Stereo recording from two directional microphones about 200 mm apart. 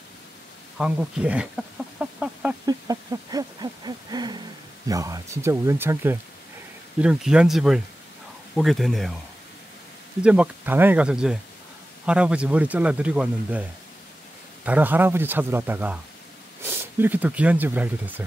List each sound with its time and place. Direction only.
0.7 s speech: 5° right (ahead or behind)
2.0 s chicken: 5° right (ahead or behind)
2.6 s hoot: 20° right (ahead or behind)
4.8 s speech: 15° right (ahead or behind); by 9.2 s centre (ahead or behind)
10.2 s speech: 5° right (ahead or behind)